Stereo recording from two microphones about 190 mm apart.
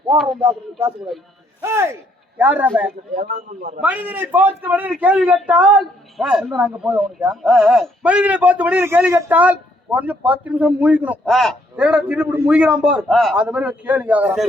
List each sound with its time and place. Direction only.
0.3 s a man's voice: 15° right (ahead or behind)
3.2 s a man's voice: 45° right (ahead or behind)
3.8 s a man's voice: 10° right (ahead or behind)